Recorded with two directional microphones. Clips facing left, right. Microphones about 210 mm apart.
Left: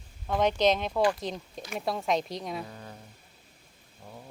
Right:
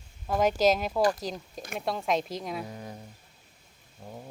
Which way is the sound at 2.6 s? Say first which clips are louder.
Right 4 dB; 15° right (ahead or behind).